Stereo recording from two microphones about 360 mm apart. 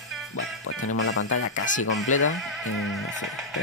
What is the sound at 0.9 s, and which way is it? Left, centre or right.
Speech, left.